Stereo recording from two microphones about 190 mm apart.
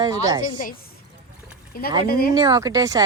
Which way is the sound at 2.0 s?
55° left (ahead or behind).